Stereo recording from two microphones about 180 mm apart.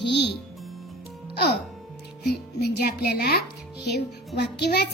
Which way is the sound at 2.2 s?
60° left (ahead or behind).